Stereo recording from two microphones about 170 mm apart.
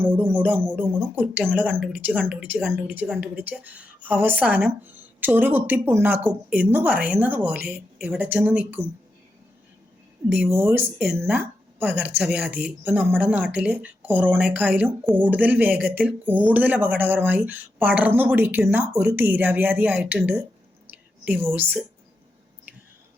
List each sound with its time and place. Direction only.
0.0 s speech: 15° right (ahead or behind)
10.3 s speech: 15° right (ahead or behind)